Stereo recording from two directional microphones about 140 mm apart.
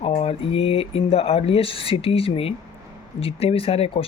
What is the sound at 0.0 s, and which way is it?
Speech, 45° left (ahead or behind).